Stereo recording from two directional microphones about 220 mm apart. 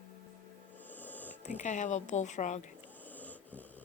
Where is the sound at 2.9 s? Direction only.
10° left (ahead or behind).